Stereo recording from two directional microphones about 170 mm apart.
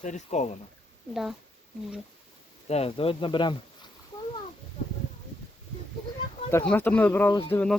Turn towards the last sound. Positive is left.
turn(degrees=10)  # may be behind; listen again after turning